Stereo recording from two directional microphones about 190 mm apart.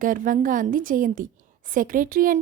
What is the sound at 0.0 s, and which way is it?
A woman's voice, 45° right (ahead or behind).